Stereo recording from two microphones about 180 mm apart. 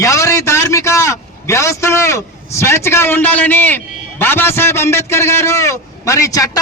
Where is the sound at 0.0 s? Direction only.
15° left (ahead or behind).